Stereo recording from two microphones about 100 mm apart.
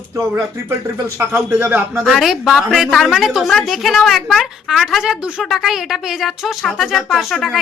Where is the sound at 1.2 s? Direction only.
20° right (ahead or behind).